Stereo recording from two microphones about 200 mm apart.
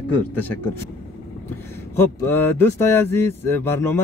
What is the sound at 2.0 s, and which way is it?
Speech, 10° left (ahead or behind).